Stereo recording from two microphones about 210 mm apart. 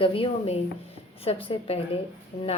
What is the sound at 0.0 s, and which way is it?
Speech, 25° left (ahead or behind).